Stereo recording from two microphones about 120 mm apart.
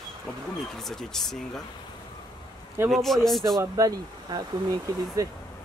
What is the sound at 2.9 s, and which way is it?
Speech, centre (ahead or behind).